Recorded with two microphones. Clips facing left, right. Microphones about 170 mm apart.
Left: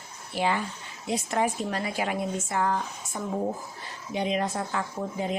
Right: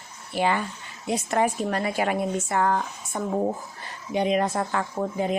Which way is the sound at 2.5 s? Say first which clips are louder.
Right 3 dB; 70° right (ahead or behind).